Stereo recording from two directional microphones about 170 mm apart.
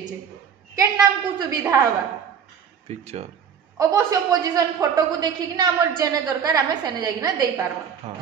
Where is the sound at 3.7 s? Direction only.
20° right (ahead or behind).